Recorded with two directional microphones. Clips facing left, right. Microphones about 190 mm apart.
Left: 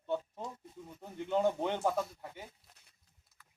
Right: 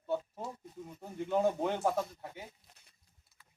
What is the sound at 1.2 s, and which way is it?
Speech, 10° right (ahead or behind).